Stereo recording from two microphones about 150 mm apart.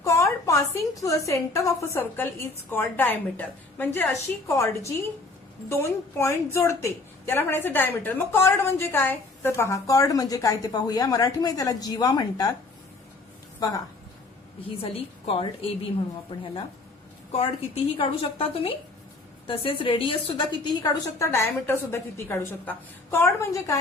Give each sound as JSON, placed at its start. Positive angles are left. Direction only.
{"t": 0.0, "sound": "a woman's voice", "side_deg": 20}
{"t": 13.6, "sound": "a woman's voice", "side_deg": 25}
{"t": 14.8, "sound": "a woman's voice", "side_deg": 40}
{"t": 17.9, "sound": "a woman's voice", "side_deg": 35}